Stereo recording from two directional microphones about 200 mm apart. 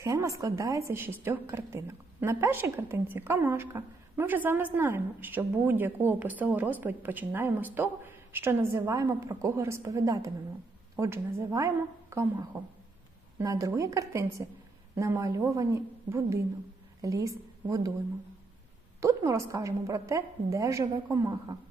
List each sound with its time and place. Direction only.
0.0 s a woman's voice: 15° right (ahead or behind)
18.9 s a woman's voice: 15° right (ahead or behind)